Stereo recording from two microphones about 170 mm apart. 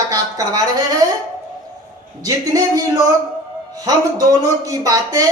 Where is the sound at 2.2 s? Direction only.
20° right (ahead or behind).